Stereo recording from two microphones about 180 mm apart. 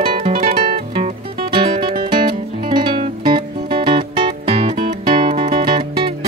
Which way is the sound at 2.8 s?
30° right (ahead or behind).